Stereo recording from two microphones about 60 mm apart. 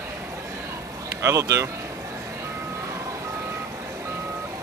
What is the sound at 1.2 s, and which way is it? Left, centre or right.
Speech, right.